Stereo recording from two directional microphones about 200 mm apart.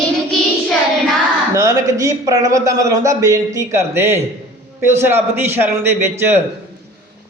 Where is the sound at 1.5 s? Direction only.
15° right (ahead or behind).